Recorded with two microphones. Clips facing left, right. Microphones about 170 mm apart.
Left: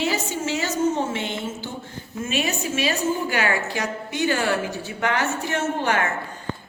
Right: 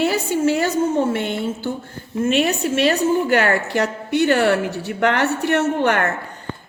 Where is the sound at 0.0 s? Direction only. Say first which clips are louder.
Right 7 dB; 55° right (ahead or behind).